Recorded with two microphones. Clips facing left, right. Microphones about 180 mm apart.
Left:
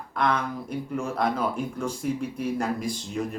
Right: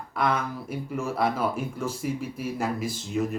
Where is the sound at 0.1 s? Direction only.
5° right (ahead or behind).